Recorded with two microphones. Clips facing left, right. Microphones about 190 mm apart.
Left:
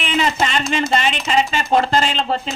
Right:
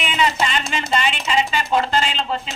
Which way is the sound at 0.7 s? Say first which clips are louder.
Left 3 dB; 40° left (ahead or behind).